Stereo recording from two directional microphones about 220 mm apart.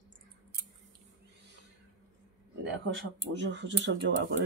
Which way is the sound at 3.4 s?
55° right (ahead or behind).